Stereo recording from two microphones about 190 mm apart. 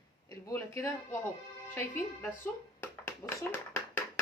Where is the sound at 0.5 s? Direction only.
15° left (ahead or behind).